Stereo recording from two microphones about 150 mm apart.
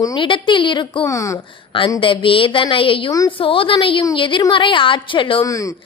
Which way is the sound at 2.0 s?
35° left (ahead or behind).